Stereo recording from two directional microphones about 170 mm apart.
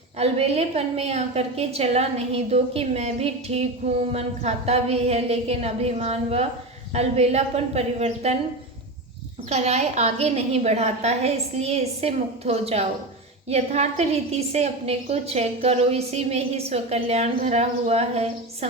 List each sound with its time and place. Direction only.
0.2 s a woman's voice: 40° right (ahead or behind)
9.5 s a woman's voice: 40° right (ahead or behind)